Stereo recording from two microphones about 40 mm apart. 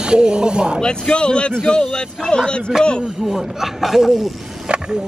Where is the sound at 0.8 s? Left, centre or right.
Left.